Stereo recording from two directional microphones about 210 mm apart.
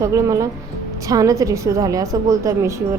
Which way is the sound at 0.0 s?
15° right (ahead or behind).